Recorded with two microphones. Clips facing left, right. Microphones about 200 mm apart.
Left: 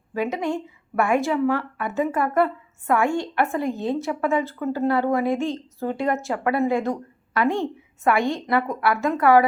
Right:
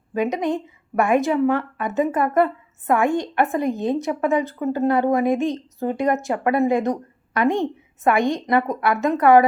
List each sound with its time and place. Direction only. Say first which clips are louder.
0.1 s a woman's voice: right 3 dB; 20° right (ahead or behind)